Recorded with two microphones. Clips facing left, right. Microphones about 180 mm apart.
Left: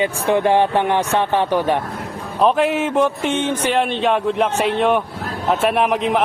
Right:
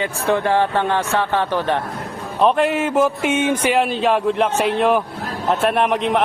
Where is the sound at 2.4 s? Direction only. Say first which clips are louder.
Even; centre (ahead or behind).